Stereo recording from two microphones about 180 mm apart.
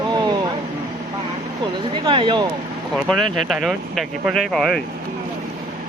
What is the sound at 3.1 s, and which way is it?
Speech, centre (ahead or behind).